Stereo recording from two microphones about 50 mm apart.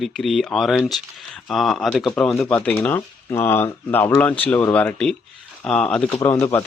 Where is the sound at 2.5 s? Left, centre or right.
Left.